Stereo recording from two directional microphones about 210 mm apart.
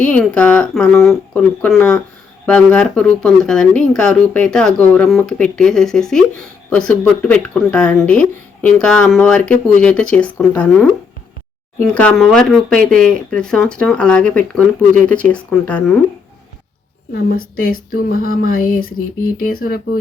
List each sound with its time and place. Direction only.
0.0 s speech: 5° left (ahead or behind)
17.2 s speech: 45° left (ahead or behind)